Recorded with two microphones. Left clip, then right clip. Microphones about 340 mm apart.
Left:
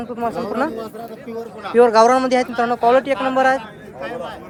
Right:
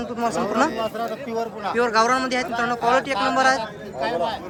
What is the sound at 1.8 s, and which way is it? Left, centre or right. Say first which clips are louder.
Speech: left 8 dB; centre.